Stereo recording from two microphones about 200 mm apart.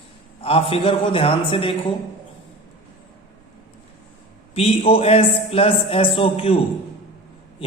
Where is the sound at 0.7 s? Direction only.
25° left (ahead or behind).